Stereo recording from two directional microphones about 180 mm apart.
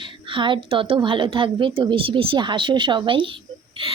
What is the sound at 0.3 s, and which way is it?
A woman's voice, 25° right (ahead or behind).